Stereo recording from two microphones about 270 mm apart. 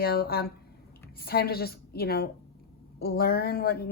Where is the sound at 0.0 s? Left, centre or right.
Left.